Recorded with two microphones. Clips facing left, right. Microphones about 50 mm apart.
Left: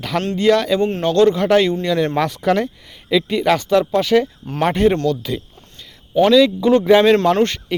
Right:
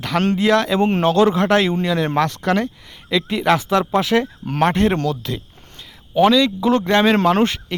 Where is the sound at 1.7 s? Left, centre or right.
Centre.